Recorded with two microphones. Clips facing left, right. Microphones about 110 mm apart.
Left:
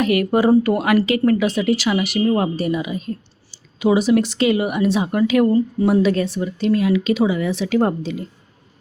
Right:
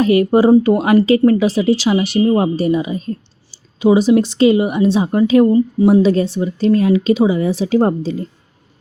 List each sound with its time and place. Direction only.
0.0 s a woman's voice: 30° right (ahead or behind)
6.0 s speech: 30° right (ahead or behind)